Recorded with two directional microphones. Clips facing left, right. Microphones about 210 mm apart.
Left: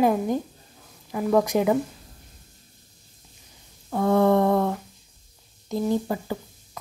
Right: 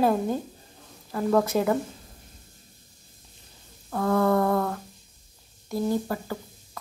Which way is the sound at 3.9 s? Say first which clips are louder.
Left 3 dB; 20° left (ahead or behind).